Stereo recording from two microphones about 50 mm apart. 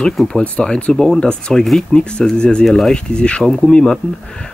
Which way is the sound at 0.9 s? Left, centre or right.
Centre.